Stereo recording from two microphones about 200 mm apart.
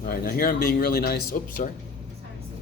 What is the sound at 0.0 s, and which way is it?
Speech, 45° left (ahead or behind).